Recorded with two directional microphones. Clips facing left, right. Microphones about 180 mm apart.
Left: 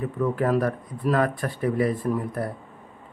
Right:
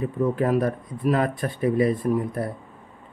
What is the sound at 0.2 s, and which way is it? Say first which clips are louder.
Speech: right 1 dB; 20° right (ahead or behind).